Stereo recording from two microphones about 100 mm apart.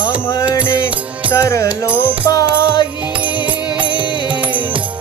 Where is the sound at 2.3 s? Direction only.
45° left (ahead or behind).